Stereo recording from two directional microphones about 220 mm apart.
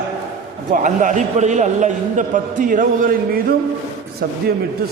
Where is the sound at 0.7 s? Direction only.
35° right (ahead or behind).